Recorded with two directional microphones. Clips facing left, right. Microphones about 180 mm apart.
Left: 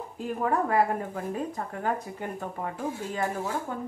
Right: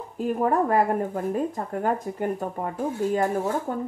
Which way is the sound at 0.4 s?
45° right (ahead or behind).